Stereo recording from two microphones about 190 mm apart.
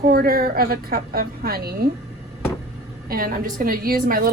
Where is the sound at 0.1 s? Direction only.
50° right (ahead or behind).